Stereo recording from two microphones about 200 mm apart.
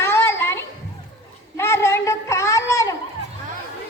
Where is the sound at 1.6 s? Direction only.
10° left (ahead or behind).